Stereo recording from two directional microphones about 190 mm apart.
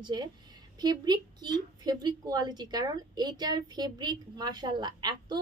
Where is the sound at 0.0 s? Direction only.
20° right (ahead or behind).